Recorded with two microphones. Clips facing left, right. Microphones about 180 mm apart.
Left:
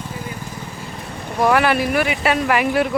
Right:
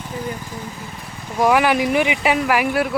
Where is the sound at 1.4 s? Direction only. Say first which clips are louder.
Even; 15° right (ahead or behind).